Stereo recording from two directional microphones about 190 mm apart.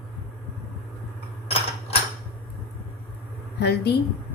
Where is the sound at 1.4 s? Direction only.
30° left (ahead or behind).